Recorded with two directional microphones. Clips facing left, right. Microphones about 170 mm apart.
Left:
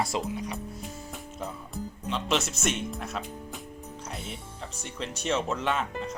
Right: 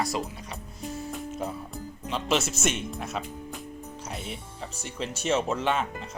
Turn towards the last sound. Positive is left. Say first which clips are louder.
# right 2 dB
turn(degrees=0)  # may be behind; listen again after turning